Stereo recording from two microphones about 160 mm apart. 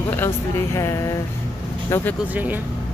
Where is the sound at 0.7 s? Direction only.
20° left (ahead or behind).